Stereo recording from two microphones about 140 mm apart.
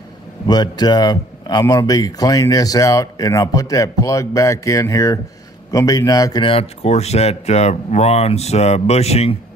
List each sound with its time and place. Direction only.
0.5 s speech: 30° left (ahead or behind)
6.4 s speech: 45° left (ahead or behind)